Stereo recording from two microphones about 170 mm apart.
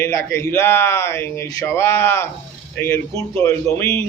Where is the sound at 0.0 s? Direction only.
15° left (ahead or behind).